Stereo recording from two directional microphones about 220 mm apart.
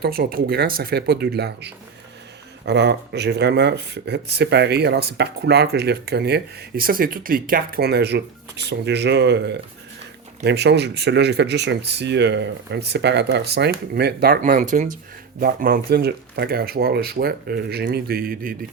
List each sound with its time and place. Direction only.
0.0 s speech: 45° right (ahead or behind)